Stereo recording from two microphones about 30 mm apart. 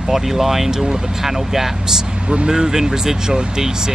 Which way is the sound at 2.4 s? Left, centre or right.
Right.